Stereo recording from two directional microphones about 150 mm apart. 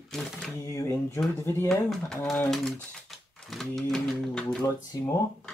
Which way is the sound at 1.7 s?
Centre (ahead or behind).